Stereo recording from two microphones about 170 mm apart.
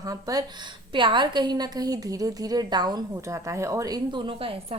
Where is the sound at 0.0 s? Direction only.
20° right (ahead or behind).